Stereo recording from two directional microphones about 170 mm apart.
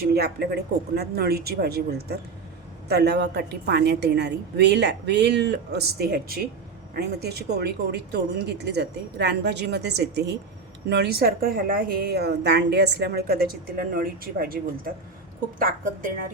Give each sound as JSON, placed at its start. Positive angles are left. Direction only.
{"t": 0.0, "sound": "a woman's voice", "side_deg": -70}